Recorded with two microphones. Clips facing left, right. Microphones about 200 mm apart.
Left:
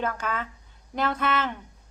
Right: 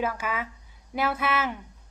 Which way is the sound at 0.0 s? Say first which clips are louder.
Even; 10° right (ahead or behind).